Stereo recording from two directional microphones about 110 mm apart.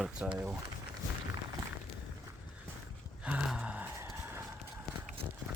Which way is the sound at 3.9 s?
25° right (ahead or behind).